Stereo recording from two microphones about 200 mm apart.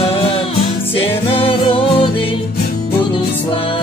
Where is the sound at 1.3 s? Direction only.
25° left (ahead or behind).